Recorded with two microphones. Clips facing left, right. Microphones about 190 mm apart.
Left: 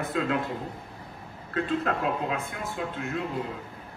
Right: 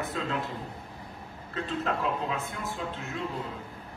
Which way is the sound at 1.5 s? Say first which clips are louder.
Left 4 dB; 55° left (ahead or behind).